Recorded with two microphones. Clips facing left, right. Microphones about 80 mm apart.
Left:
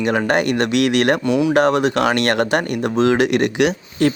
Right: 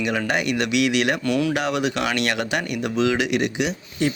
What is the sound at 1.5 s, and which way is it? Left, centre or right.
Speech, left.